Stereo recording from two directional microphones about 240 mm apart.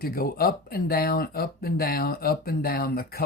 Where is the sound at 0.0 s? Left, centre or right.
Left.